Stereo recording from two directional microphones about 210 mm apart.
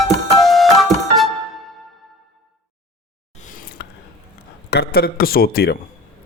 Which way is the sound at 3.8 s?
50° left (ahead or behind).